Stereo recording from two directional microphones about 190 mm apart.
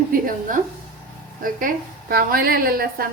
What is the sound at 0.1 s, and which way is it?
A woman's voice, 45° right (ahead or behind).